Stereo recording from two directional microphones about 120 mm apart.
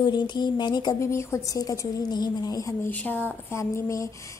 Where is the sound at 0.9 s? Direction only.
25° left (ahead or behind).